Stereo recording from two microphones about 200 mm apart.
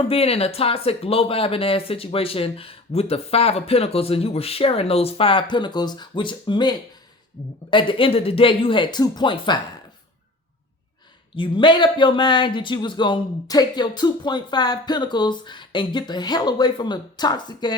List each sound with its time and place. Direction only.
0.1 s speech: 30° left (ahead or behind)
11.3 s speech: 25° left (ahead or behind)